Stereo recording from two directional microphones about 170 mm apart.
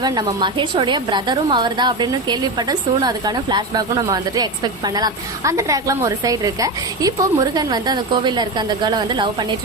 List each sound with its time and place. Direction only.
0.0 s a woman's voice: 25° right (ahead or behind)